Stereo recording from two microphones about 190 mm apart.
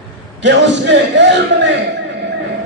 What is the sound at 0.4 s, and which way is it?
A man's voice, 65° right (ahead or behind).